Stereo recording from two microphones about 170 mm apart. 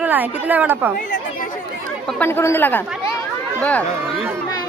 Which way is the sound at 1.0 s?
50° left (ahead or behind).